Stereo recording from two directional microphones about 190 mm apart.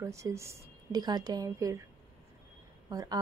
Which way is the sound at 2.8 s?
20° right (ahead or behind).